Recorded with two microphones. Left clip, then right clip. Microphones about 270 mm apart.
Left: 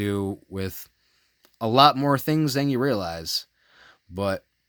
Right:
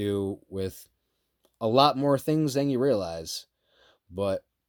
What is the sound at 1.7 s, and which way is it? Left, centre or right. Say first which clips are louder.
Speech: left 4 dB; left.